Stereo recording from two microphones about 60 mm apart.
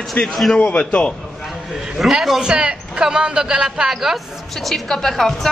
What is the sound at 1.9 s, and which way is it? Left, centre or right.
Speech, centre.